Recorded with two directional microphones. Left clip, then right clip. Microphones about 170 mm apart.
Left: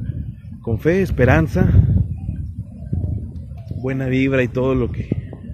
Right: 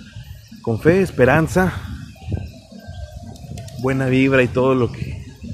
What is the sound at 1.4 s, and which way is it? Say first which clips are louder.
Speech: right 3 dB; 20° right (ahead or behind).